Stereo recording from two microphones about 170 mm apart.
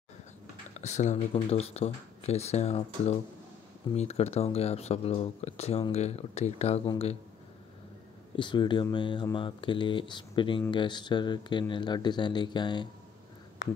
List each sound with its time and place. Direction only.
0.7 s speech: 40° left (ahead or behind)
8.4 s speech: 30° left (ahead or behind)